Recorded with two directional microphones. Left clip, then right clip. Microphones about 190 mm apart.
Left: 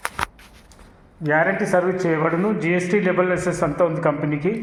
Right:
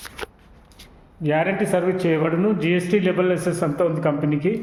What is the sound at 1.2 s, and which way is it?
Speech, 20° right (ahead or behind).